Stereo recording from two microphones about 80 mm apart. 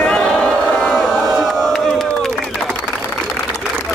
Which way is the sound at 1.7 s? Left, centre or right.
Centre.